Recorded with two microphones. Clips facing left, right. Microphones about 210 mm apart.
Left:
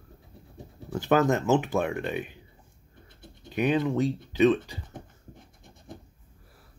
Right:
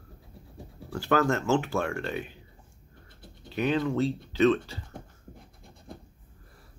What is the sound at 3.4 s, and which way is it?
Speech, 15° left (ahead or behind).